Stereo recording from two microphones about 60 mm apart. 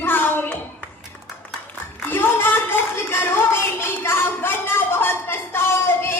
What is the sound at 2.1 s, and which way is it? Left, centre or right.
Speech, left.